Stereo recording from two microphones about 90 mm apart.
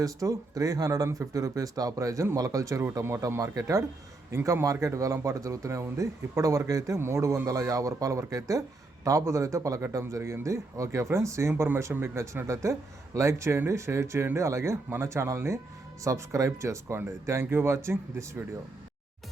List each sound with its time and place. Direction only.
0.0 s speech: 40° right (ahead or behind)